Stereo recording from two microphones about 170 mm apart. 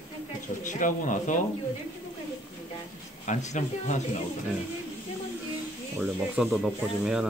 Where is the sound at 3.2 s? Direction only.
45° left (ahead or behind).